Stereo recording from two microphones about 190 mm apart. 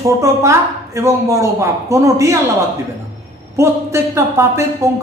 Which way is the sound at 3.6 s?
15° right (ahead or behind).